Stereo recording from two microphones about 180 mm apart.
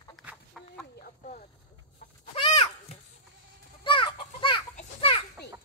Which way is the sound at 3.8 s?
25° left (ahead or behind).